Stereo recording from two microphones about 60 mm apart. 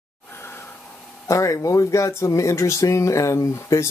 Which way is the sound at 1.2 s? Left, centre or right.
Left.